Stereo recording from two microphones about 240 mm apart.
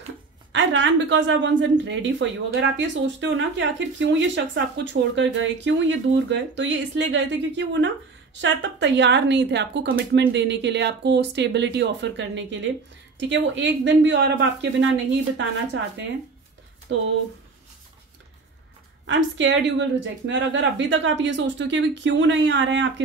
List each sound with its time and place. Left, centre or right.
0.5 s speech: right
19.0 s speech: right